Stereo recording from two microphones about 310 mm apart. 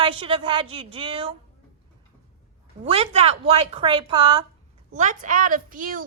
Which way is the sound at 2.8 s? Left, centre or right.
Centre.